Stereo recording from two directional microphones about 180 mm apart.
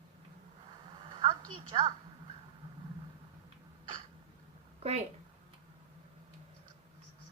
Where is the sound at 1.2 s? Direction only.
25° right (ahead or behind).